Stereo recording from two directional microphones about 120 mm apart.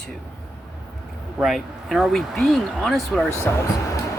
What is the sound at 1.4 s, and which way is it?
Speech, centre (ahead or behind).